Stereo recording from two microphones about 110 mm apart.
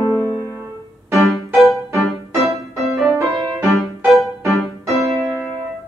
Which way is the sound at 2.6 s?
25° right (ahead or behind).